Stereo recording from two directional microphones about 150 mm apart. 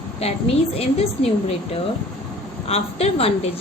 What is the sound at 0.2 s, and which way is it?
A woman's voice, 40° left (ahead or behind).